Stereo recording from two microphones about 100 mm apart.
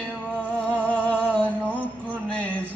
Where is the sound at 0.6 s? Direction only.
15° right (ahead or behind).